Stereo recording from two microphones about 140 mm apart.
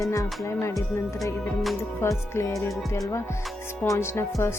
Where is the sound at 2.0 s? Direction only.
20° left (ahead or behind).